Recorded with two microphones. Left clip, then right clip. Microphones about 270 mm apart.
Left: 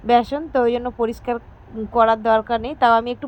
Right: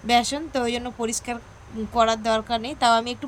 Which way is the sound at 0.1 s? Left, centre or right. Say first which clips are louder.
Left 4 dB; centre.